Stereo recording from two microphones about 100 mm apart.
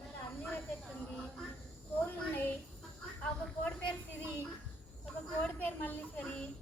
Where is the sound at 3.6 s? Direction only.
15° left (ahead or behind).